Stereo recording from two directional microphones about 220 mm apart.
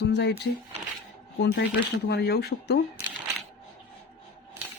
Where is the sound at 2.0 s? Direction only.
45° left (ahead or behind).